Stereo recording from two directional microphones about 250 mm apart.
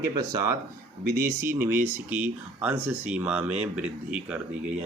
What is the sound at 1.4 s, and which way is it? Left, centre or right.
Speech, centre.